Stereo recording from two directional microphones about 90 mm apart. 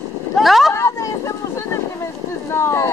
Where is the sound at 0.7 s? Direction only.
35° left (ahead or behind).